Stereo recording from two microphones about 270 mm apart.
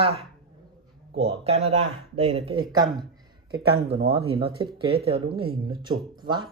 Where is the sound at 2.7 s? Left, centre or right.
Centre.